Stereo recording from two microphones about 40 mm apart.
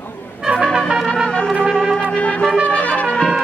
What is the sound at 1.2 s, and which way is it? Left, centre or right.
Trumpet, left.